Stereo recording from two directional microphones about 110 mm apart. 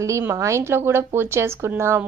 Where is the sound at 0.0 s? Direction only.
25° right (ahead or behind).